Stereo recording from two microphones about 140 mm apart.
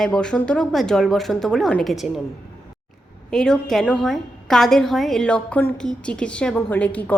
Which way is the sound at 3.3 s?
5° left (ahead or behind).